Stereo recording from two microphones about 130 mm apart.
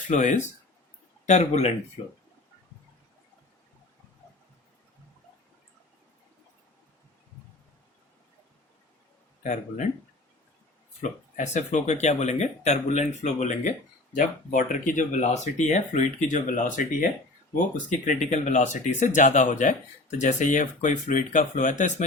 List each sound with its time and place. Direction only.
0.1 s speech: 70° left (ahead or behind)
9.4 s speech: 70° left (ahead or behind)
11.0 s speech: 70° left (ahead or behind)
14.2 s speech: 85° left
18.0 s speech: 70° left (ahead or behind)